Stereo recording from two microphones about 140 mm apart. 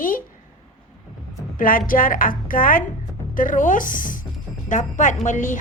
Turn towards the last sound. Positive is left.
turn(degrees=65)  # may be behind; listen again after turning